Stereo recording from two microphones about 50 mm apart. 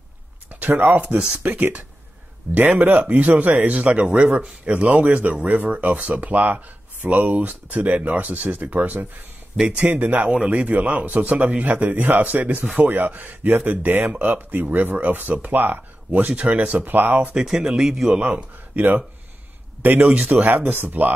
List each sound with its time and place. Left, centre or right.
0.5 s a man's voice: right
9.6 s a man's voice: right
10.0 s a man's voice: right
16.3 s a man's voice: right
17.3 s a man's voice: centre
18.2 s a man's voice: right